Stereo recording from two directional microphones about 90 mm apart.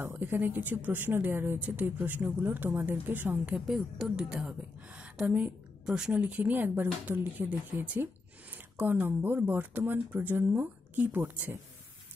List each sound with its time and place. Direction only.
0.0 s speech: 20° right (ahead or behind)
3.5 s a woman's voice: 5° right (ahead or behind)